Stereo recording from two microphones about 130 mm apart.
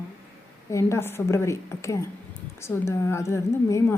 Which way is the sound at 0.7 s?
20° left (ahead or behind).